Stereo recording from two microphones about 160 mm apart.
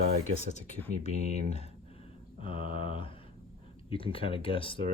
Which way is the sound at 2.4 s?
35° left (ahead or behind).